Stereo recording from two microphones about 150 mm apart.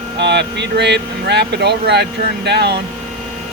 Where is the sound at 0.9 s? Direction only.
90° right.